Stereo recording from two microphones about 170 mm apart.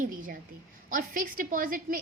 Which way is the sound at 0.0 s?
55° right (ahead or behind).